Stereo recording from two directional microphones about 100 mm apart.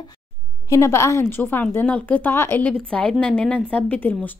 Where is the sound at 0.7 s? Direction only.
25° left (ahead or behind).